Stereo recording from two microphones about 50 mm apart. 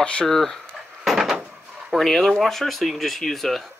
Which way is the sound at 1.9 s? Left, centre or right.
Centre.